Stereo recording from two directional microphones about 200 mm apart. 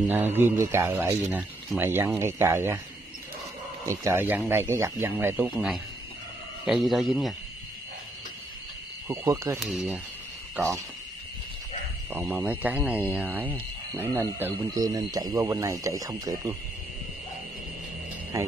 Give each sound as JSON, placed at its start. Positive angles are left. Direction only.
{"t": 0.0, "sound": "speech", "side_deg": -10}
{"t": 3.8, "sound": "speech", "side_deg": -15}
{"t": 9.0, "sound": "speech", "side_deg": -15}
{"t": 12.1, "sound": "speech", "side_deg": -10}